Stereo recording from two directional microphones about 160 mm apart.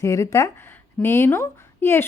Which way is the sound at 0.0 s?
20° left (ahead or behind).